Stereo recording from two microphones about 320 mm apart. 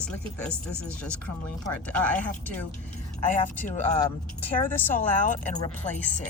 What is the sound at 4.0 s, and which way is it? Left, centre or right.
Speech, centre.